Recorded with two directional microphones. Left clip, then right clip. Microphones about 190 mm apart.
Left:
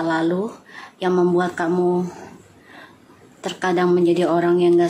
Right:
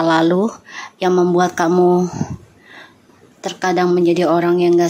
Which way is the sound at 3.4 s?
20° right (ahead or behind).